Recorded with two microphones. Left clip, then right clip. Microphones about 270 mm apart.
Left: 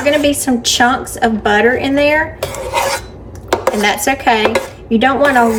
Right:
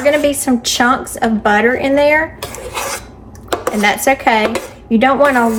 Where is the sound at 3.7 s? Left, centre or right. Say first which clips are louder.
Right 2 dB; centre.